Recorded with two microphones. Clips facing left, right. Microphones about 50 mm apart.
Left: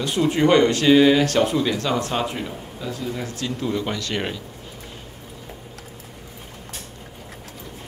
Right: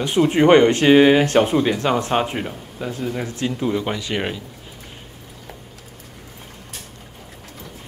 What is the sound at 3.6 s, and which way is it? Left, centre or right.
Speech, centre.